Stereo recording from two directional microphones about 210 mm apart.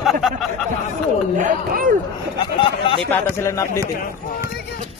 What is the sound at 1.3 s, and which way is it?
Speech, 40° right (ahead or behind).